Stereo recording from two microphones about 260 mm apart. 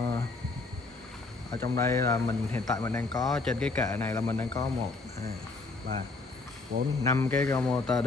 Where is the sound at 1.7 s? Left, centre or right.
Centre.